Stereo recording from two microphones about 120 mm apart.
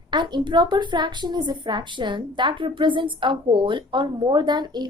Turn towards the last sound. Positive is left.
turn(degrees=-35)  # may be behind; listen again after turning